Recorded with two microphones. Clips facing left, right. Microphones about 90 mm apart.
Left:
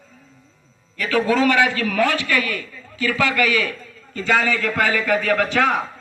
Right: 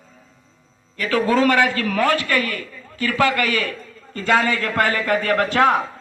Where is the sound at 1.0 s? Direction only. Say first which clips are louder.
Right 1 dB; 40° right (ahead or behind).